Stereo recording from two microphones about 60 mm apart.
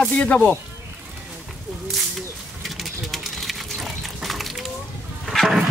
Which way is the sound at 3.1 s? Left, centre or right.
Centre.